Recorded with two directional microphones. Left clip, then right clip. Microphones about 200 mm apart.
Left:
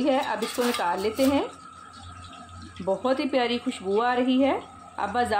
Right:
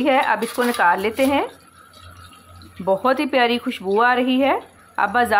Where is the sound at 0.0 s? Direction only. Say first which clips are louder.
Right 7 dB; 15° right (ahead or behind).